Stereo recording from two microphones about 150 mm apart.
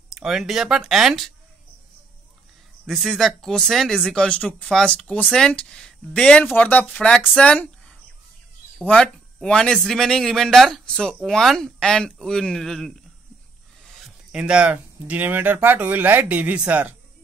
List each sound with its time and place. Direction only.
0.1 s speech: 5° right (ahead or behind)
2.9 s speech: centre (ahead or behind)
13.9 s speech: 5° right (ahead or behind)